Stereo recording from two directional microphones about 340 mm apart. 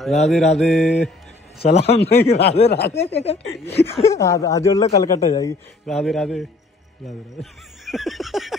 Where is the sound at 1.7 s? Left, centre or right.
Centre.